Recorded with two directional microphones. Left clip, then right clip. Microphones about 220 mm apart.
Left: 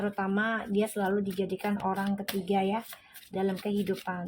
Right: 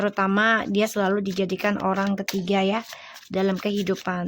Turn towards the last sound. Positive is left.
turn(degrees=-35)  # may be behind; listen again after turning